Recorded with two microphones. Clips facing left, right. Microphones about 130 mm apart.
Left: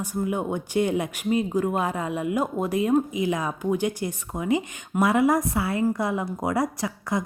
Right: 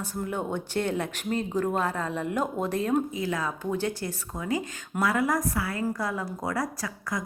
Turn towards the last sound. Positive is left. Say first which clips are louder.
# left 5 dB
turn(degrees=25)  # may be behind; listen again after turning